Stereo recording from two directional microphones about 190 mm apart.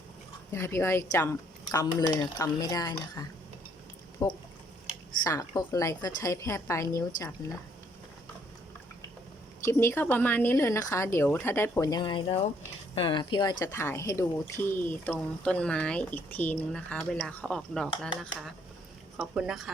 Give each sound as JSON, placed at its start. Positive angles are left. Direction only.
{"t": 0.5, "sound": "speech", "side_deg": 15}
{"t": 9.6, "sound": "speech", "side_deg": 15}